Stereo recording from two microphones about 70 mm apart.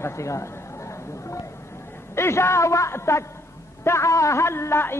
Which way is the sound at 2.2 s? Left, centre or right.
Left.